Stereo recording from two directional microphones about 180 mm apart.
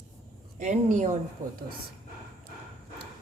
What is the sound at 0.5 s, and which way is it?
Speech, 45° right (ahead or behind).